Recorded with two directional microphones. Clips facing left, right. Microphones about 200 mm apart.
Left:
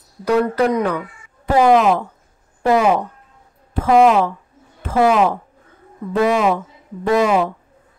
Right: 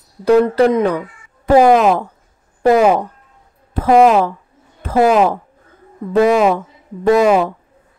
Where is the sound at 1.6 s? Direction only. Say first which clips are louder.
Right 2 dB; 45° right (ahead or behind).